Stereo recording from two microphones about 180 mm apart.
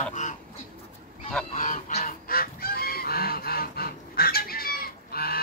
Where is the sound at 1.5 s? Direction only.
40° left (ahead or behind).